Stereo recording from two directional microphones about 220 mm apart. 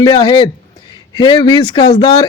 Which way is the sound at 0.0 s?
20° left (ahead or behind).